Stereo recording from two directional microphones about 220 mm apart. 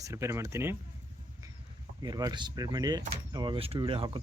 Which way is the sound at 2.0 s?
15° right (ahead or behind).